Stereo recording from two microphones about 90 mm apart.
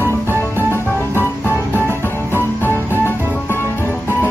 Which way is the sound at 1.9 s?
25° left (ahead or behind).